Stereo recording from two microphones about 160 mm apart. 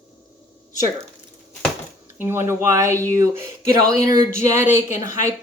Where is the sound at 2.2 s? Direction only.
15° right (ahead or behind).